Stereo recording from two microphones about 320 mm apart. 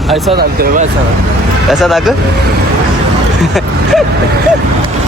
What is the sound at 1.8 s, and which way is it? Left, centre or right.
Speech, centre.